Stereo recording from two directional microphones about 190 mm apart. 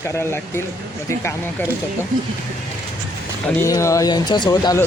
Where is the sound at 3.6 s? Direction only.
15° left (ahead or behind).